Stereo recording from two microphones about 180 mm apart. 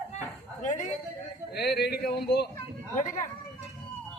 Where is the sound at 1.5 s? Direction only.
65° left (ahead or behind).